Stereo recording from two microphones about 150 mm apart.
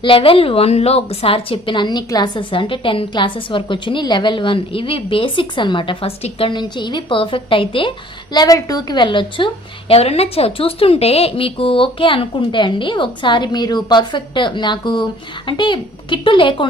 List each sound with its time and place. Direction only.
0.0 s a woman's voice: 35° left (ahead or behind)